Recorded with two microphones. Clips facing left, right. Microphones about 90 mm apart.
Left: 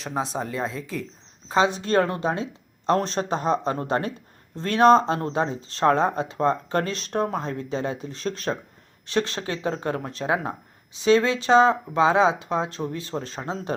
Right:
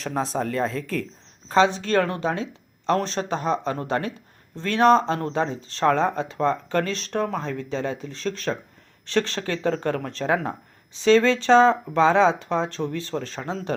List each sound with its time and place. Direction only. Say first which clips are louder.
0.0 s speech: right 2 dB; centre (ahead or behind)
1.8 s speech: even; 25° left (ahead or behind)
4.8 s speech: left 1 dB; 20° left (ahead or behind)
6.0 s speech: even; 15° left (ahead or behind)